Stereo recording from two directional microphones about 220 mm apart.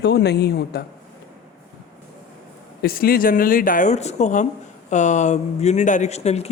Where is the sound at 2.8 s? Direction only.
40° left (ahead or behind).